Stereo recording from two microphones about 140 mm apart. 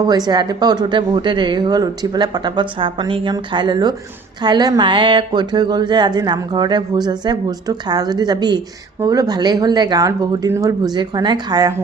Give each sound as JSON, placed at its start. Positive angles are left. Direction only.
{"t": 0.0, "sound": "speech", "side_deg": -30}